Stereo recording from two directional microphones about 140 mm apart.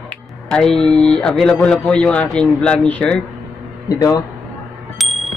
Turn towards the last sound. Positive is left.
turn(degrees=0)  # may be behind; listen again after turning